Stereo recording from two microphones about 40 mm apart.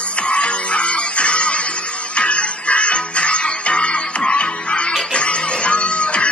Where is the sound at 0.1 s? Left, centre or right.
Left.